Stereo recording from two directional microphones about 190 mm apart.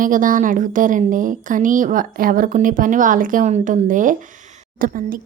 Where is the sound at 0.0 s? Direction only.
45° right (ahead or behind).